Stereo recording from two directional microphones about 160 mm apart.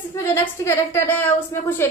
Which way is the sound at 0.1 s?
15° left (ahead or behind).